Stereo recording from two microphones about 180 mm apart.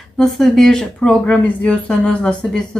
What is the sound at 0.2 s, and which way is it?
Speech, centre (ahead or behind).